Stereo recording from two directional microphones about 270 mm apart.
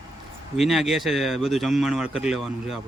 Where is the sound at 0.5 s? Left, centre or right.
Centre.